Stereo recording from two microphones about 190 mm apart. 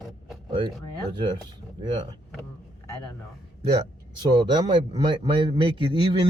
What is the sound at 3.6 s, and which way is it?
Speech, 25° right (ahead or behind).